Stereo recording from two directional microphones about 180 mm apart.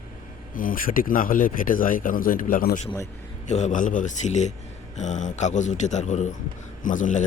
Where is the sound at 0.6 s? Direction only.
50° left (ahead or behind).